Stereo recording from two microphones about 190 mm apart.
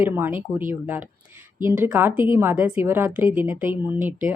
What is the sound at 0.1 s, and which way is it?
Speech, 10° right (ahead or behind).